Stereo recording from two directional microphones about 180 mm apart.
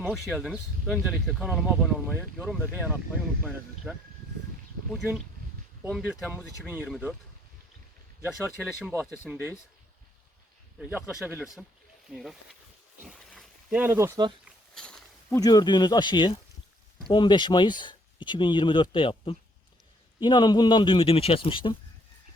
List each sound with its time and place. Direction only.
0.1 s speech: centre (ahead or behind)
2.6 s speech: 10° right (ahead or behind)
5.9 s speech: centre (ahead or behind)
6.3 s speech: 10° right (ahead or behind)
8.3 s speech: centre (ahead or behind)
8.9 s speech: 10° left (ahead or behind)
10.8 s speech: 5° right (ahead or behind)
13.1 s a sound: centre (ahead or behind)
14.4 s a sound: 5° left (ahead or behind)
15.4 s speech: 20° left (ahead or behind)